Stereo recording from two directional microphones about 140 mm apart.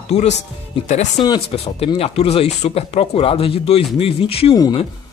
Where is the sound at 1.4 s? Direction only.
45° left (ahead or behind).